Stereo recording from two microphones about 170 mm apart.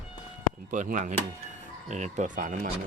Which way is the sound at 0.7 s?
50° right (ahead or behind).